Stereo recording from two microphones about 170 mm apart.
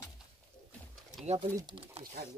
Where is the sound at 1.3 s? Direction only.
30° right (ahead or behind).